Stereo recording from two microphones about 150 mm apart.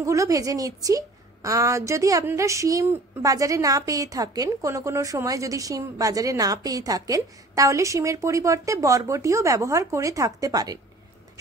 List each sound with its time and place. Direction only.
0.0 s a woman's voice: 20° right (ahead or behind)